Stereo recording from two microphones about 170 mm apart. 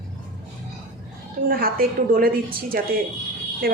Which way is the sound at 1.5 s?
60° right (ahead or behind).